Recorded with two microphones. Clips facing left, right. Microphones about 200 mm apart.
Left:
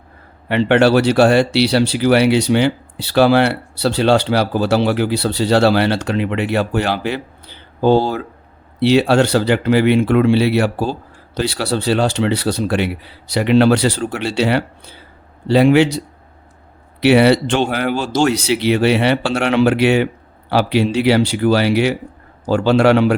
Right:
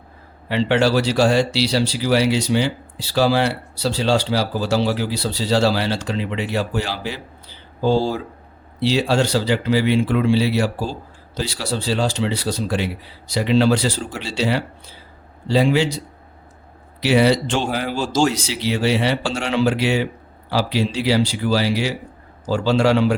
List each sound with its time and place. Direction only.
0.4 s speech: 60° left (ahead or behind)
17.0 s speech: 65° left (ahead or behind)